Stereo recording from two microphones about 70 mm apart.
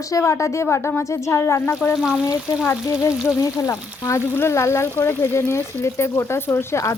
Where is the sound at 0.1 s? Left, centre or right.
Left.